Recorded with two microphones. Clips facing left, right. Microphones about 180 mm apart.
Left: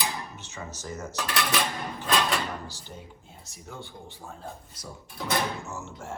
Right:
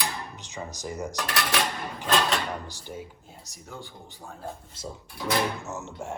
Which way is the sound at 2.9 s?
5° right (ahead or behind).